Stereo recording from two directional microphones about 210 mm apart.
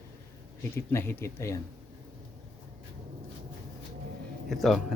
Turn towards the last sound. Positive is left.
turn(degrees=0)  # may be behind; listen again after turning